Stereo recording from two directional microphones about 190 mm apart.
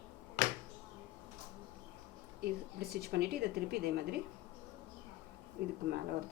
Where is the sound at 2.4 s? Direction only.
55° right (ahead or behind).